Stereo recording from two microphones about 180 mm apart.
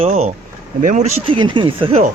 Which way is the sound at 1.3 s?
25° right (ahead or behind).